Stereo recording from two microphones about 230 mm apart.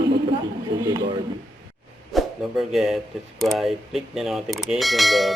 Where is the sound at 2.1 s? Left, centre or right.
Centre.